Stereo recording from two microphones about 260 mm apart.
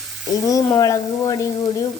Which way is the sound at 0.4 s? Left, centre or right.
Centre.